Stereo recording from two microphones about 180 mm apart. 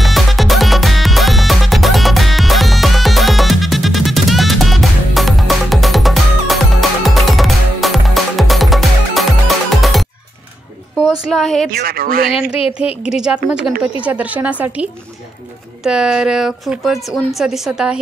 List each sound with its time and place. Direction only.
0.0 s music: centre (ahead or behind)
11.2 s a woman's voice: centre (ahead or behind)
11.7 s speech: 55° right (ahead or behind)
13.0 s a woman's voice: 5° right (ahead or behind)